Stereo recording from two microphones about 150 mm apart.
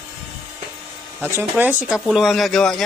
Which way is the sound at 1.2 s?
15° right (ahead or behind).